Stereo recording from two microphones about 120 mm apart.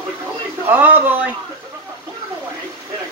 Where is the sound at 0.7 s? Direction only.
15° right (ahead or behind).